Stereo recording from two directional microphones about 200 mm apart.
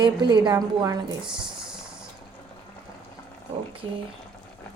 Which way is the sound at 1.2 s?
5° right (ahead or behind).